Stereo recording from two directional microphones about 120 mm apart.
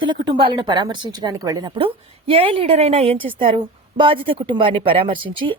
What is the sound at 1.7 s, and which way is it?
A woman's voice, 50° right (ahead or behind).